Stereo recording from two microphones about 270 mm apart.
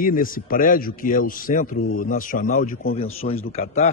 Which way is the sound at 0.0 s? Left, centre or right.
Left.